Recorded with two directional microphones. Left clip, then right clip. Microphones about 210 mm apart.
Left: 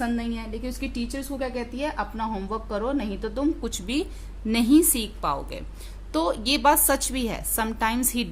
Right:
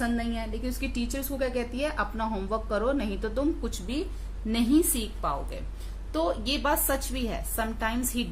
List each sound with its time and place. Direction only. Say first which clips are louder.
0.0 s a woman's voice: left 1 dB; 30° left (ahead or behind)